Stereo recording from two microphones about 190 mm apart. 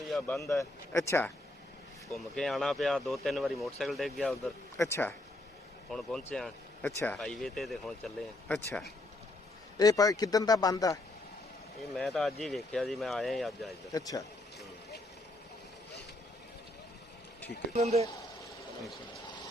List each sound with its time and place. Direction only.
0.3 s speech: 15° left (ahead or behind)
2.1 s speech: centre (ahead or behind)
4.8 s speech: 10° left (ahead or behind)
9.7 s a man's voice: 20° left (ahead or behind)
11.8 s speech: centre (ahead or behind)
13.9 s a man's voice: 20° left (ahead or behind)
17.7 s speech: 35° right (ahead or behind)